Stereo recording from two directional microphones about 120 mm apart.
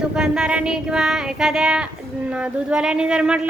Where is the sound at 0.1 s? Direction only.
5° right (ahead or behind).